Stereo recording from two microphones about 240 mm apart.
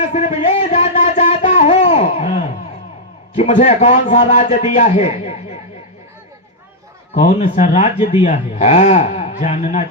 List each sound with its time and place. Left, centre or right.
0.0 s a sound: left
3.3 s a man's voice: left
7.1 s a man's voice: left